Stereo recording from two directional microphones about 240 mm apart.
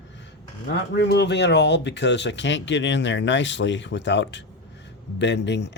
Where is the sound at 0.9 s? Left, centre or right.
Left.